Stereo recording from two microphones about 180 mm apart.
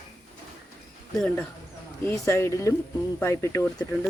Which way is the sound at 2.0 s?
15° left (ahead or behind).